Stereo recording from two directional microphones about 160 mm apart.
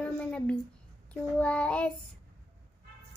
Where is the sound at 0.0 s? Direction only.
5° left (ahead or behind).